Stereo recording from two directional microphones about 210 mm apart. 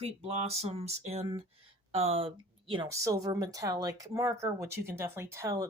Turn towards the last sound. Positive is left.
turn(degrees=-15)  # may be behind; listen again after turning